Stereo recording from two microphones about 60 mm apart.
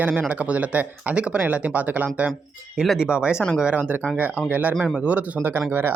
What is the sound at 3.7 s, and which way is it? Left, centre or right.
Speech, right.